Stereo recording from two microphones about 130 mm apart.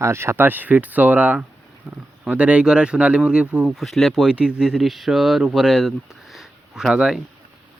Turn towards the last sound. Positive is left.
turn(degrees=-5)  # may be behind; listen again after turning